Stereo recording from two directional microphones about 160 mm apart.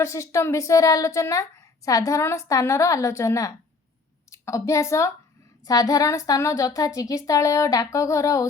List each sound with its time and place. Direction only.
0.0 s a woman's voice: 20° left (ahead or behind)